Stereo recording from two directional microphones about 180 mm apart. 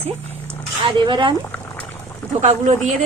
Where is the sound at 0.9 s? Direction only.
25° right (ahead or behind).